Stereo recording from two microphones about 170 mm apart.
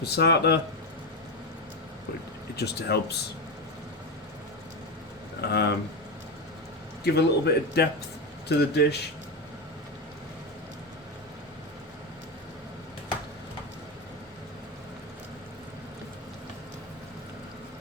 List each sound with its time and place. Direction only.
0.0 s a man's voice: 75° left (ahead or behind)
2.6 s a man's voice: 70° left (ahead or behind)
5.4 s a man's voice: 75° left (ahead or behind)
7.0 s a man's voice: 75° left (ahead or behind)